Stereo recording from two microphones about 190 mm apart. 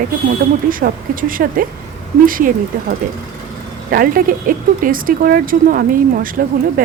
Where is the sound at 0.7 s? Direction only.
45° right (ahead or behind).